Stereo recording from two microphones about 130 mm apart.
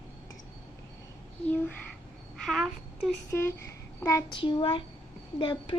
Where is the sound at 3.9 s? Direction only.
25° left (ahead or behind).